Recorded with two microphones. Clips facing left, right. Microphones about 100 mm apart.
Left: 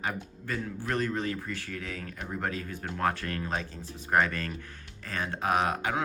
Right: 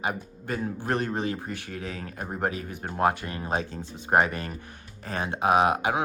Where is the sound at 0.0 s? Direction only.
20° right (ahead or behind).